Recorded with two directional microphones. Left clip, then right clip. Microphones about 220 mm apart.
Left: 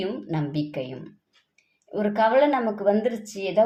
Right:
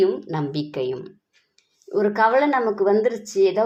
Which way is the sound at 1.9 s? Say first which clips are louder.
Right 2 dB; 25° right (ahead or behind).